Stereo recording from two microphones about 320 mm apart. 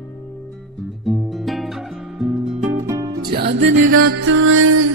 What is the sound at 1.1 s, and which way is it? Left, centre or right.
Music, centre.